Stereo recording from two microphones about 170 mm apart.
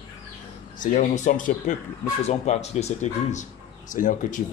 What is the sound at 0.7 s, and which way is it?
A man's voice, 45° left (ahead or behind).